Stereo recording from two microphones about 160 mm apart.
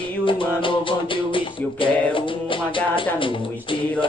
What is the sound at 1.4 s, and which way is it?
Music, 30° left (ahead or behind).